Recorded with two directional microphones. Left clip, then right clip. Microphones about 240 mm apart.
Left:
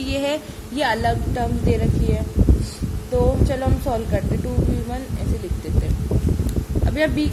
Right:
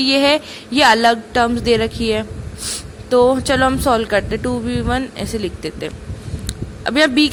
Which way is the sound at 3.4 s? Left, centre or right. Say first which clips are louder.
Right 8 dB; right.